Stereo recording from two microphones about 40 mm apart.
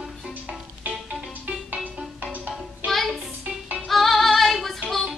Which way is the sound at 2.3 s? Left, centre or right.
Right.